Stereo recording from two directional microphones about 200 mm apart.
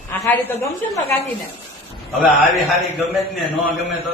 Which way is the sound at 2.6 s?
Centre (ahead or behind).